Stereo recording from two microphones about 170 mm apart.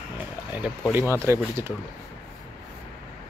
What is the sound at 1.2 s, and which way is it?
Speech, 15° right (ahead or behind).